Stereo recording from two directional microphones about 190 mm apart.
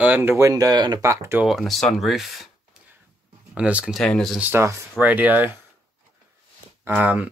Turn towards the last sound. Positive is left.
turn(degrees=-10)  # may be behind; listen again after turning